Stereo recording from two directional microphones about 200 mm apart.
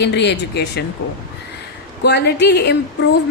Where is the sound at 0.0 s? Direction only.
55° left (ahead or behind).